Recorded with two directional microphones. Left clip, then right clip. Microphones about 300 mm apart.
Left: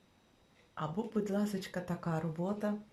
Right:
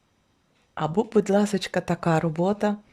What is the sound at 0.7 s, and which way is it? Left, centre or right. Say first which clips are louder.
Speech: right 14 dB; right.